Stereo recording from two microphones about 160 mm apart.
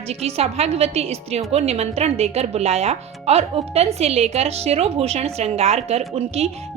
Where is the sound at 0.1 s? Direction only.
40° right (ahead or behind).